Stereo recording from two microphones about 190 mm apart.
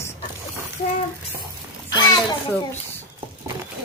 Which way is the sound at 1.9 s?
20° left (ahead or behind).